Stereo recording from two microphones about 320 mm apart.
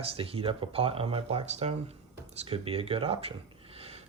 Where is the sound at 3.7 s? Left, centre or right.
Centre.